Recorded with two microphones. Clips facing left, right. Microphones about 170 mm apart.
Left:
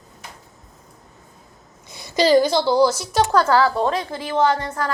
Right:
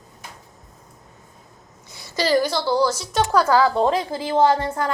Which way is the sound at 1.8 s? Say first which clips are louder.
Left 5 dB; 20° left (ahead or behind).